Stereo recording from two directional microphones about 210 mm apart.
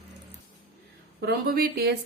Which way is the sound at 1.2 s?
45° right (ahead or behind).